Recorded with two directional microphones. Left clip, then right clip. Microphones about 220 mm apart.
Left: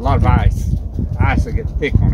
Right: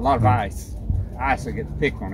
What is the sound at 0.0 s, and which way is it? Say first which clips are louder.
Speech: even; 15° right (ahead or behind).